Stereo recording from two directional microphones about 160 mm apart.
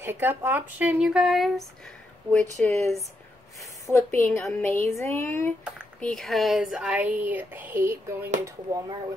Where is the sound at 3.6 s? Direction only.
20° left (ahead or behind).